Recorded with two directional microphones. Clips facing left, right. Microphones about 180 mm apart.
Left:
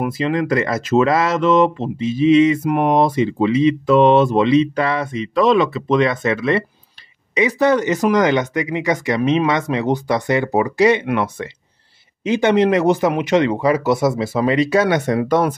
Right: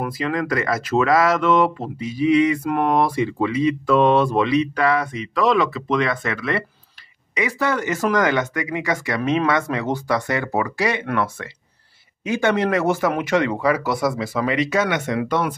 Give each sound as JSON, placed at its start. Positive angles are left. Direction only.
{"t": 0.0, "sound": "speech", "side_deg": 25}